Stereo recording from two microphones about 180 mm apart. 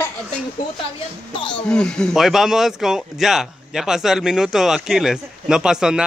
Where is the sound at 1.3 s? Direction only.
25° left (ahead or behind).